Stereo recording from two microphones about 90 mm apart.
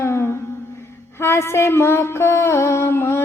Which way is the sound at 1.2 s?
30° left (ahead or behind).